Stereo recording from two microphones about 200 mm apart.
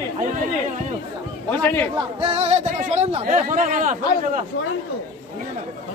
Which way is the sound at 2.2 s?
30° right (ahead or behind).